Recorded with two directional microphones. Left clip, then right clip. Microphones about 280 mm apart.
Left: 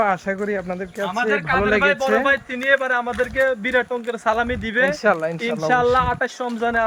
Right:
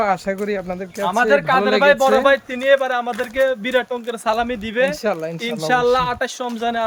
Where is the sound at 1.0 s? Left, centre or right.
Centre.